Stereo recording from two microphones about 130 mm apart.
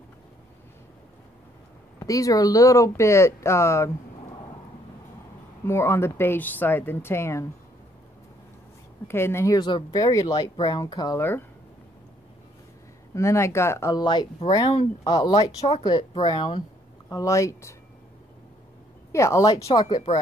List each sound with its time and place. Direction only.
2.0 s speech: 25° left (ahead or behind)
5.7 s speech: 20° left (ahead or behind)
9.0 s speech: 20° left (ahead or behind)
9.6 s speech: 40° left (ahead or behind)
9.8 s speech: 25° left (ahead or behind)
11.1 s speech: 15° left (ahead or behind)
13.1 s speech: 20° left (ahead or behind)
13.9 s speech: 35° left (ahead or behind)
17.1 s speech: 25° left (ahead or behind)
19.1 s speech: 20° left (ahead or behind)